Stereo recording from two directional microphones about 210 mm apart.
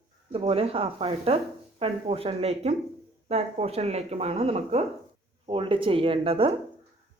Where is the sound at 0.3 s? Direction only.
25° right (ahead or behind).